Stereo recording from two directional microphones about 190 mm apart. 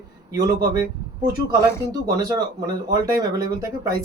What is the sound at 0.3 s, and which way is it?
Speech, 20° right (ahead or behind).